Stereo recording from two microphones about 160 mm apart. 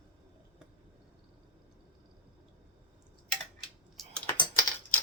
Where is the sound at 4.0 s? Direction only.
Centre (ahead or behind).